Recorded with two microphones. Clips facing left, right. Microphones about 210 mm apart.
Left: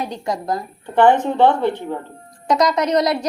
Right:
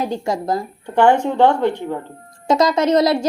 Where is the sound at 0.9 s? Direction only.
10° right (ahead or behind).